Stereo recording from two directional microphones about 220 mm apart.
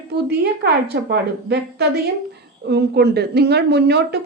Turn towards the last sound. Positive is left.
turn(degrees=-50)  # may be behind; listen again after turning